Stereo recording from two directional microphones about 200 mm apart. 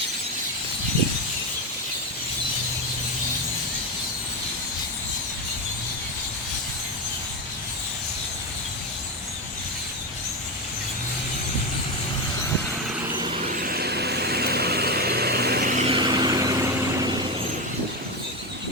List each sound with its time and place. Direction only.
13.1 s vehicle: 30° right (ahead or behind)
15.9 s vehicle: 20° right (ahead or behind)